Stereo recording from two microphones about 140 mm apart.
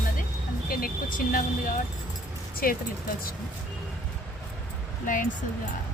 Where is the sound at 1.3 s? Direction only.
80° left.